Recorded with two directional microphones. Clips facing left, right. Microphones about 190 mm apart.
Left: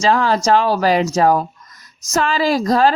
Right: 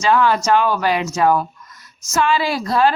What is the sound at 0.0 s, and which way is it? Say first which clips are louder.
Speech: left 1 dB; 35° left (ahead or behind).